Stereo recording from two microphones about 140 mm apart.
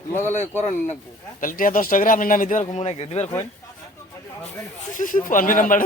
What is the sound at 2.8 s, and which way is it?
Speech, 45° left (ahead or behind).